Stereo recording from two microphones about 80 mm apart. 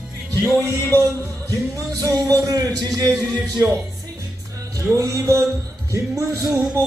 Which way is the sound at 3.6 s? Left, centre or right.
Right.